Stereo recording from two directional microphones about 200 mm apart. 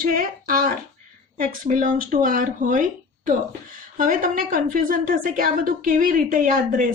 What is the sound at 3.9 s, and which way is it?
Speech, 40° right (ahead or behind).